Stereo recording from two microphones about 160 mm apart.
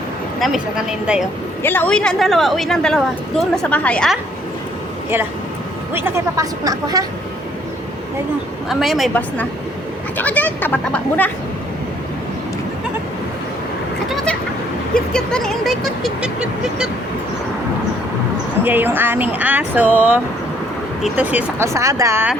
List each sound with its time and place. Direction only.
0.3 s a woman's voice: centre (ahead or behind)
1.6 s a woman's voice: 10° left (ahead or behind)
5.9 s speech: 15° right (ahead or behind)
8.7 s a woman's voice: centre (ahead or behind)
14.1 s a woman's voice: centre (ahead or behind)
18.6 s speech: 10° right (ahead or behind)